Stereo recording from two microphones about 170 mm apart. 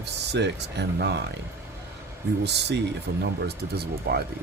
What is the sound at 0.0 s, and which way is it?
Speech, 85° right.